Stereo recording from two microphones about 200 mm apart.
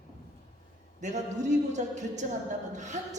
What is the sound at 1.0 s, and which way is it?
A man's voice, 35° right (ahead or behind).